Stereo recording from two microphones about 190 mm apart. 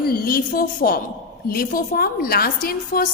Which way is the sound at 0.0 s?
50° left (ahead or behind).